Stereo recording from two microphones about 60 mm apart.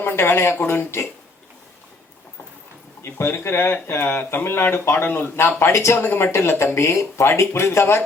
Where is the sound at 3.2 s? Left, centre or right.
Left.